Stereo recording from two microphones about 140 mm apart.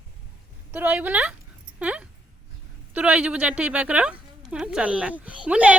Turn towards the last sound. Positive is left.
turn(degrees=-10)  # may be behind; listen again after turning